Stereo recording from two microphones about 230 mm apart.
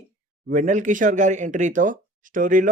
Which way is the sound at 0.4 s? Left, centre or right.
Right.